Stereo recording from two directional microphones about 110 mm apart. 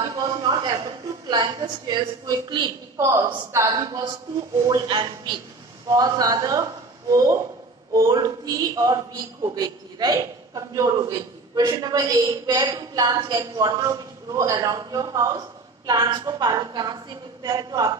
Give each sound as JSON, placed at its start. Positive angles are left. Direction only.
{"t": 0.1, "sound": "a sound", "side_deg": -35}
{"t": 1.3, "sound": "a man's voice", "side_deg": -35}
{"t": 3.0, "sound": "a woman's voice", "side_deg": -25}